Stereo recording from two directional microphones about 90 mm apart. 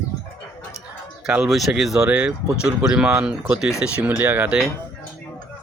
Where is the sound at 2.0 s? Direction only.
15° right (ahead or behind).